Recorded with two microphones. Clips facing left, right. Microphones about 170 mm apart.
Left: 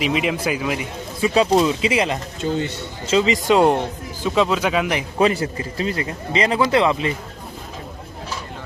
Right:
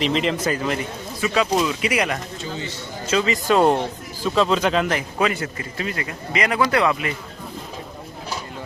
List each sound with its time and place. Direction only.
0.0 s a man's voice: 10° left (ahead or behind)
1.2 s speech: 30° left (ahead or behind)
2.4 s a man's voice: 55° left (ahead or behind)
3.1 s a man's voice: 20° left (ahead or behind)
5.2 s speech: 30° left (ahead or behind)